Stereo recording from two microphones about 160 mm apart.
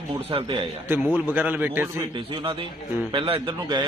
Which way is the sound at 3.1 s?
35° right (ahead or behind).